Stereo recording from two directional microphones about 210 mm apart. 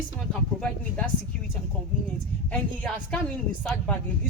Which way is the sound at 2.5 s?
5° left (ahead or behind).